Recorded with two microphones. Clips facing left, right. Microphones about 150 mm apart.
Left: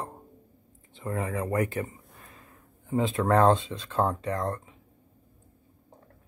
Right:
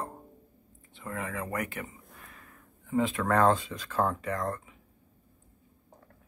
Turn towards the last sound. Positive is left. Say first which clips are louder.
# left 2 dB
turn(degrees=30)  # may be behind; listen again after turning